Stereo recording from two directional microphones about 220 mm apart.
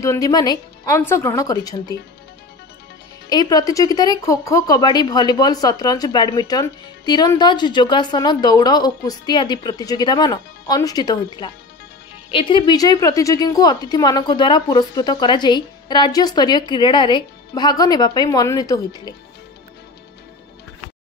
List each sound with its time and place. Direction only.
0.0 s speech: 15° left (ahead or behind)
3.3 s a woman's voice: 15° left (ahead or behind)